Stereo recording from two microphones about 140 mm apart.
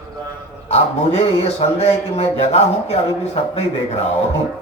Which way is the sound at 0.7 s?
45° left (ahead or behind).